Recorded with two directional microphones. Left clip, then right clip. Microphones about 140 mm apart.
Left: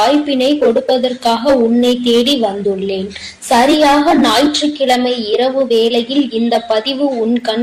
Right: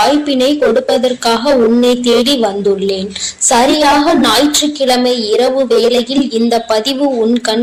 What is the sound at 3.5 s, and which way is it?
A woman's voice, 25° right (ahead or behind).